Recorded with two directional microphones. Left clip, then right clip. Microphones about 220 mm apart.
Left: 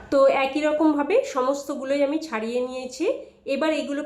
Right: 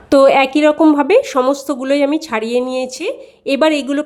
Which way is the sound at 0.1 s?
45° right (ahead or behind).